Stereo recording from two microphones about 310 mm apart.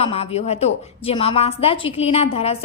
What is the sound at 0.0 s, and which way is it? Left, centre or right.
A woman's voice, centre.